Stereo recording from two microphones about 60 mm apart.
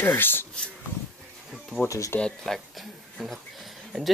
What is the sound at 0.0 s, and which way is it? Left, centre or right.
Speech, left.